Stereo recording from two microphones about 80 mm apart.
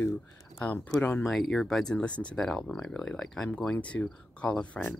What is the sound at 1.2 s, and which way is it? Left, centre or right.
Speech, centre.